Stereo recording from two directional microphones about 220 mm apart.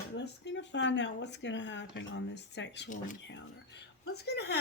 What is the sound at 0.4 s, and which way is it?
Speech, 55° left (ahead or behind).